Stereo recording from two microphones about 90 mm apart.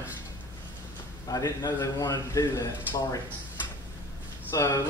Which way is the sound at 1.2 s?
45° left (ahead or behind).